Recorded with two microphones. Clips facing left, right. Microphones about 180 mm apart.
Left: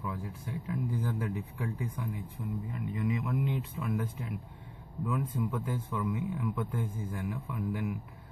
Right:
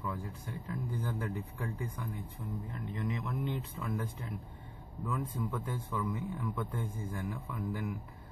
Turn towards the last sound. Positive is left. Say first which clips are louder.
# left 3 dB
turn(degrees=5)  # may be behind; listen again after turning